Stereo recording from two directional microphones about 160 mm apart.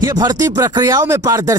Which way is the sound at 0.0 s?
20° right (ahead or behind).